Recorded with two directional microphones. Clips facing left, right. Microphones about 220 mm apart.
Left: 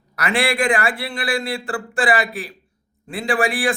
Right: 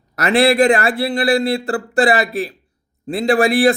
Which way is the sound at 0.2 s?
40° right (ahead or behind).